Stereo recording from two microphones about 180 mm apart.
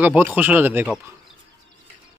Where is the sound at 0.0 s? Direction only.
10° right (ahead or behind).